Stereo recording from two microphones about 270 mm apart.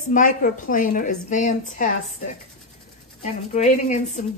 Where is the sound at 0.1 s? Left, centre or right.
Left.